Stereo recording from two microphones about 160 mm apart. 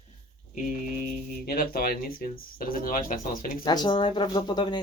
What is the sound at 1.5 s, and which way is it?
Speech, 65° left (ahead or behind).